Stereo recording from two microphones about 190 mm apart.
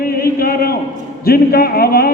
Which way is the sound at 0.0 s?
50° left (ahead or behind).